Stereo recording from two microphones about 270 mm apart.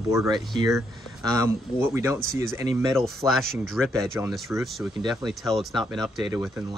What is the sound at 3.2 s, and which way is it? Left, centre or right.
Speech, centre.